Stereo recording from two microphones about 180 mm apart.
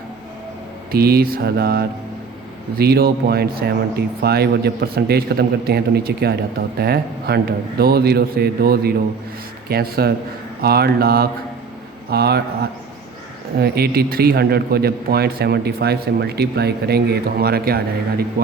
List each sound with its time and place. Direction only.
0.9 s a man's voice: 60° right (ahead or behind)
13.6 s a man's voice: 60° right (ahead or behind)